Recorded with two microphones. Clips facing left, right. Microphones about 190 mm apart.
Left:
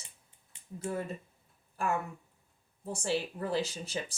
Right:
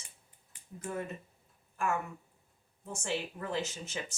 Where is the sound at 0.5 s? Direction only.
25° left (ahead or behind).